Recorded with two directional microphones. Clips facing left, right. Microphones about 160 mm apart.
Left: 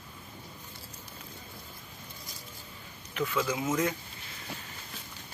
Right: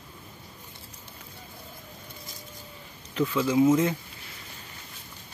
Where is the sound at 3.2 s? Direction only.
25° right (ahead or behind).